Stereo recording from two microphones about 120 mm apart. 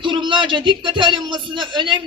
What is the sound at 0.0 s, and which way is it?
Speech, 40° right (ahead or behind).